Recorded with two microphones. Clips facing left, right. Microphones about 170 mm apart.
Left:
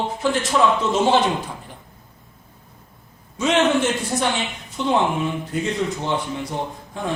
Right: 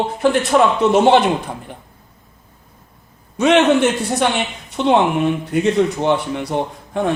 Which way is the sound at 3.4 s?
65° right (ahead or behind).